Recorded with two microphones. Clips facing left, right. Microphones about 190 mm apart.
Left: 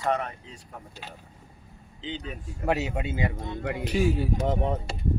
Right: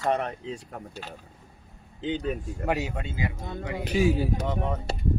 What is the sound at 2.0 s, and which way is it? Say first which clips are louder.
Speech: right 7 dB; 55° right (ahead or behind).